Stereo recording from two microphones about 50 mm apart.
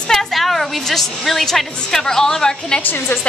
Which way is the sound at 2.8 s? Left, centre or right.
Left.